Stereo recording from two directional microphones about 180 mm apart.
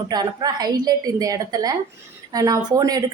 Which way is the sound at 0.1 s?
20° right (ahead or behind).